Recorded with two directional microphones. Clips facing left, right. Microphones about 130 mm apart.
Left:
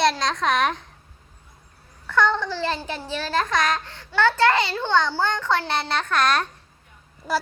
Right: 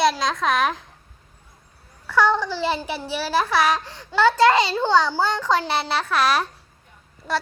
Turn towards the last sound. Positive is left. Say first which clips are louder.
# even
turn(degrees=0)  # may be behind; listen again after turning